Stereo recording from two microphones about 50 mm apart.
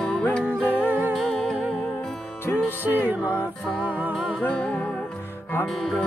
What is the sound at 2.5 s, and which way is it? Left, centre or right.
Music, left.